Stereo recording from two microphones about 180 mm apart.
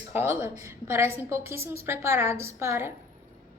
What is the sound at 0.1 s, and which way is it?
A woman's voice, 10° right (ahead or behind).